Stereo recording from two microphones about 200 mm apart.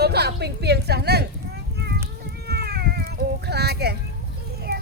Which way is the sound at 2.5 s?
55° right (ahead or behind).